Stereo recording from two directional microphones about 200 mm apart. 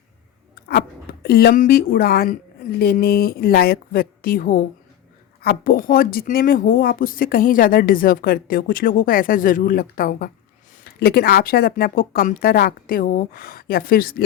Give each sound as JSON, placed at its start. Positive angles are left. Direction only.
{"t": 0.7, "sound": "speech", "side_deg": 50}